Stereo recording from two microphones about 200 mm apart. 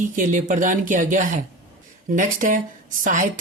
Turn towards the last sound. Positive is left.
turn(degrees=-40)  # may be behind; listen again after turning